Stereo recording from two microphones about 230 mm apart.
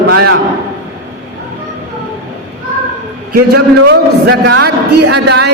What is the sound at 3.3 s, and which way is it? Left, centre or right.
A man's voice, right.